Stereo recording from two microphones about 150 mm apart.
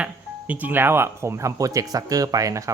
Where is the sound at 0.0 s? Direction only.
10° right (ahead or behind).